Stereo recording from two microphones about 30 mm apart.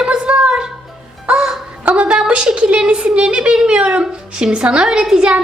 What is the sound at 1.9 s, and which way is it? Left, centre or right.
A woman's voice, right.